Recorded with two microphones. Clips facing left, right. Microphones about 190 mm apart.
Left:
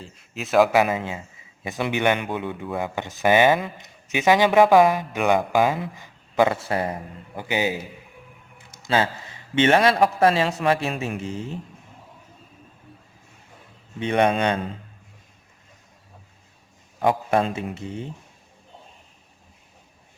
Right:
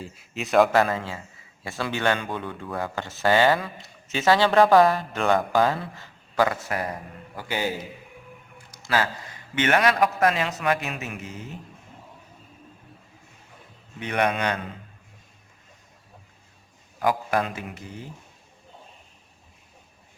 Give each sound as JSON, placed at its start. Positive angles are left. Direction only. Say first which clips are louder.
{"t": 0.0, "sound": "a man's voice", "louder": "right 1 dB", "side_deg": 0}
{"t": 7.3, "sound": "a man's voice", "louder": "left 3 dB", "side_deg": 15}
{"t": 14.0, "sound": "a man's voice", "louder": "left 5 dB", "side_deg": 25}
{"t": 17.0, "sound": "a man's voice", "louder": "left 3 dB", "side_deg": 25}